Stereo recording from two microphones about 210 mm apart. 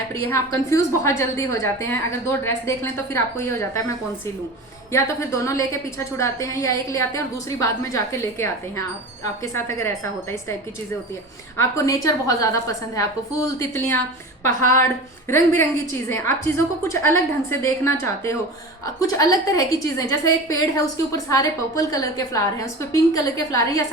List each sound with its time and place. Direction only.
0.3 s a woman's voice: 15° left (ahead or behind)
9.6 s a woman's voice: 15° left (ahead or behind)
11.5 s a woman's voice: 15° left (ahead or behind)